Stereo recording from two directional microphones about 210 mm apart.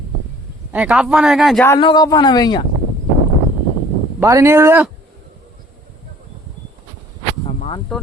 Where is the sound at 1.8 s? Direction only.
20° left (ahead or behind).